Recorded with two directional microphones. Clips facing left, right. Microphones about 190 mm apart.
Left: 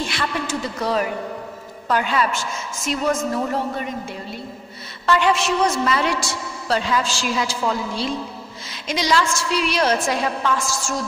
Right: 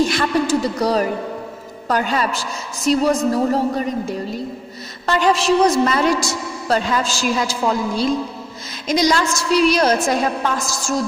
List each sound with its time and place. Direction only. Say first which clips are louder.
0.0 s a woman's voice: right 8 dB; 45° right (ahead or behind)